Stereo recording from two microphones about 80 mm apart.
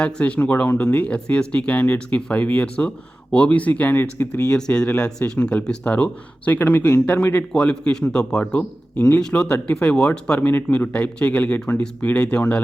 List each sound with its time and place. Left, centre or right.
0.0 s speech: centre
4.4 s speech: centre